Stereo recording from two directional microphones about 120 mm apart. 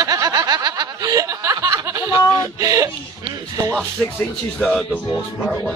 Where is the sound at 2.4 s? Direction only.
30° right (ahead or behind).